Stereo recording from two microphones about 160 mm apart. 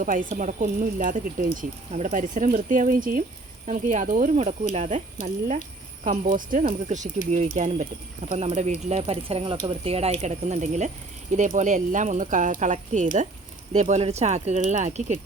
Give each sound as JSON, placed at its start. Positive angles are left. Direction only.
{"t": 0.0, "sound": "speech", "side_deg": -55}
{"t": 6.1, "sound": "speech", "side_deg": -55}